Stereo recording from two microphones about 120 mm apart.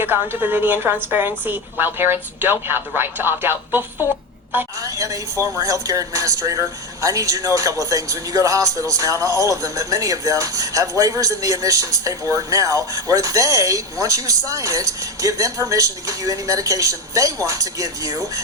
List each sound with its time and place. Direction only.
0.0 s a woman's voice: 15° right (ahead or behind)
4.8 s speech: 30° right (ahead or behind)